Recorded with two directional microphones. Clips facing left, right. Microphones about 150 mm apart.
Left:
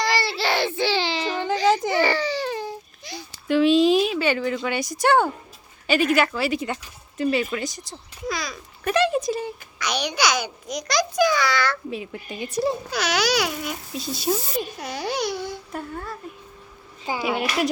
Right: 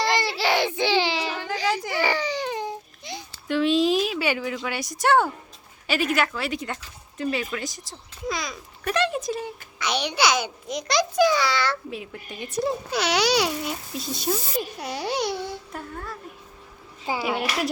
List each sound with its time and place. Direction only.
0.0 s baby cry: 20° right (ahead or behind)
1.6 s whimper: 25° left (ahead or behind)
2.0 s baby cry: 15° right (ahead or behind)
3.5 s speech: centre (ahead or behind)
8.3 s a child's voice: 20° right (ahead or behind)
8.8 s speech: 5° left (ahead or behind)
9.7 s a child's voice: 25° right (ahead or behind)
11.9 s speech: centre (ahead or behind)
12.9 s a child's voice: 30° right (ahead or behind)
14.3 s speech: 5° left (ahead or behind)
14.8 s a child's voice: 25° right (ahead or behind)
15.7 s speech: centre (ahead or behind)
17.2 s speech: 5° right (ahead or behind)